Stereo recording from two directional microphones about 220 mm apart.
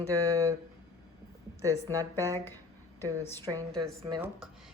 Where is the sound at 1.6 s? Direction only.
15° right (ahead or behind).